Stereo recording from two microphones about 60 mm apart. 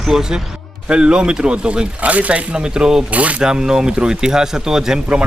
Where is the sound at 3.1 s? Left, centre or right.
Right.